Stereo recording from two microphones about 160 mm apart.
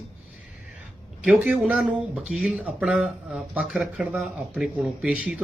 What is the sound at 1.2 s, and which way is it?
A man's voice, 5° right (ahead or behind).